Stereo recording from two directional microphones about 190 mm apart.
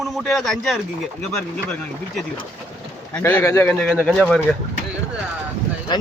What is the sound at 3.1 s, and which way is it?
Speech, 10° left (ahead or behind).